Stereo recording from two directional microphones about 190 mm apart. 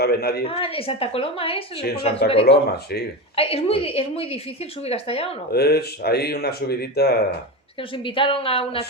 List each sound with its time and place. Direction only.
0.0 s speech: 55° left (ahead or behind)
0.4 s a woman's voice: 30° left (ahead or behind)
2.4 s speech: 60° left (ahead or behind)
3.3 s a woman's voice: 30° left (ahead or behind)
5.5 s speech: 55° left (ahead or behind)
7.9 s a woman's voice: 25° left (ahead or behind)